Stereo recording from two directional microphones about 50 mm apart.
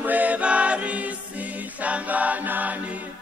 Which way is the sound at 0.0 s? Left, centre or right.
Right.